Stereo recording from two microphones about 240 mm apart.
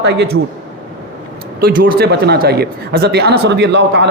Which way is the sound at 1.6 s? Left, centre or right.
Right.